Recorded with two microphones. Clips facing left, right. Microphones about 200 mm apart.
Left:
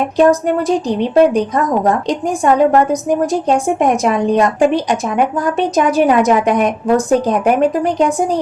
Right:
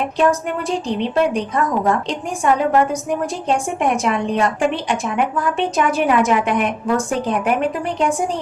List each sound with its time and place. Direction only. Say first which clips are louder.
0.2 s a woman's voice: left 7 dB; 40° left (ahead or behind)